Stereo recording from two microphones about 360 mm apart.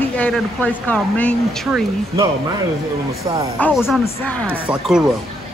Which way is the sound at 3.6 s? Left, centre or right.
Centre.